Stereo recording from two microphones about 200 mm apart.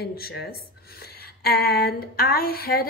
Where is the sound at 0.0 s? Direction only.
55° left (ahead or behind).